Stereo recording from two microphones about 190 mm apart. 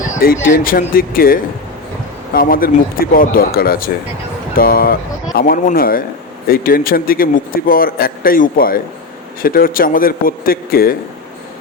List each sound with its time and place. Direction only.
0.2 s speech: 50° left (ahead or behind)